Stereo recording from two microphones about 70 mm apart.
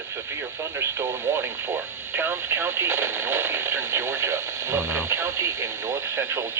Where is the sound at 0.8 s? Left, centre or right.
Right.